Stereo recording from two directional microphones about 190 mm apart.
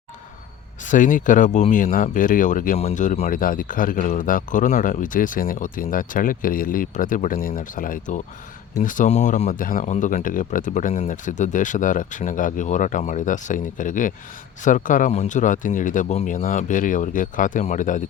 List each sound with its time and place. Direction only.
0.9 s speech: 40° left (ahead or behind)